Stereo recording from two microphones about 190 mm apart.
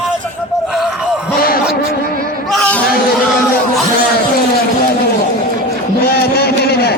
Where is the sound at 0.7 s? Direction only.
Centre (ahead or behind).